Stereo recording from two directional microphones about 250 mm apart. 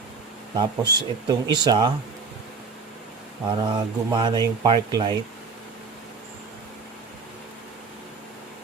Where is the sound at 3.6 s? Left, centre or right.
Centre.